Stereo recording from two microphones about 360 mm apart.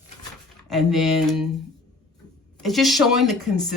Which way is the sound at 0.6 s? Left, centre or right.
Centre.